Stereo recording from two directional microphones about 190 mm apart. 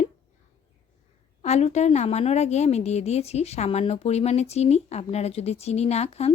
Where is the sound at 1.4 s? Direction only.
35° left (ahead or behind).